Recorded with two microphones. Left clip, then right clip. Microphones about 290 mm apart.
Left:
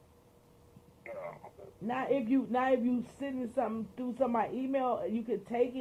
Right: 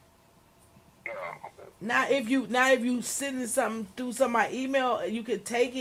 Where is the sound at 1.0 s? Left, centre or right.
Right.